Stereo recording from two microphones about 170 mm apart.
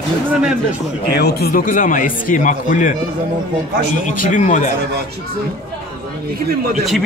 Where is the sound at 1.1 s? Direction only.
70° left (ahead or behind); by 2.9 s 50° left (ahead or behind).